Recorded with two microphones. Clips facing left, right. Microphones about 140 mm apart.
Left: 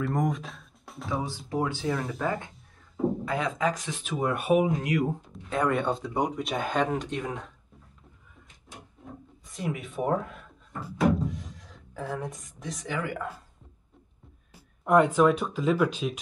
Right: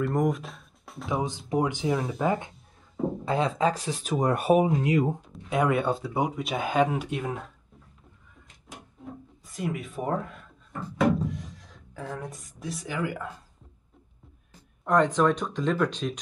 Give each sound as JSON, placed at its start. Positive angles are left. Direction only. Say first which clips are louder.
{"t": 0.0, "sound": "speech", "louder": "right 2 dB", "side_deg": 0}
{"t": 1.5, "sound": "speech", "louder": "right 3 dB", "side_deg": -20}
{"t": 5.5, "sound": "speech", "louder": "right 2 dB", "side_deg": -10}
{"t": 9.4, "sound": "speech", "louder": "right 1 dB", "side_deg": 0}
{"t": 14.5, "sound": "speech", "louder": "left 2 dB", "side_deg": 10}